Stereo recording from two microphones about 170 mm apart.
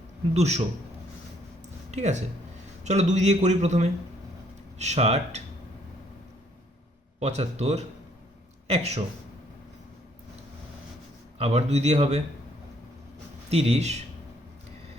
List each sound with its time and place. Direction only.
0.3 s speech: 40° right (ahead or behind)
1.9 s a man's voice: 45° right (ahead or behind)
7.2 s speech: 40° right (ahead or behind)
11.3 s speech: 40° right (ahead or behind)
13.5 s speech: 35° right (ahead or behind)